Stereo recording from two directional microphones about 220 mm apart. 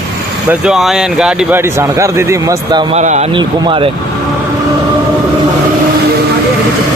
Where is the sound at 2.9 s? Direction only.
30° right (ahead or behind).